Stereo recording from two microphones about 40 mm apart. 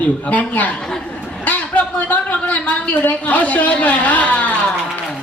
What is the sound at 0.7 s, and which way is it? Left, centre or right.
Speech, centre.